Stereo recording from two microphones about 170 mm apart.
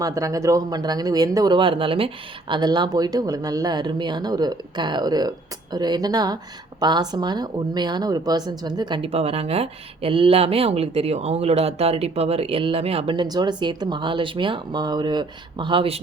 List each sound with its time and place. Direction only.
0.0 s speech: 20° right (ahead or behind)